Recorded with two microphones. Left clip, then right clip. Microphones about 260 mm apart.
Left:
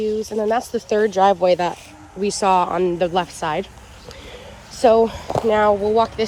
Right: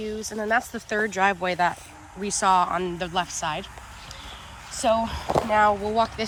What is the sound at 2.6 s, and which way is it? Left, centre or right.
Speech, left.